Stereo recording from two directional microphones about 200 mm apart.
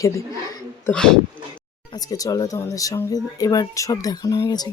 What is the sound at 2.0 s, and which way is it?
Speech, 15° left (ahead or behind).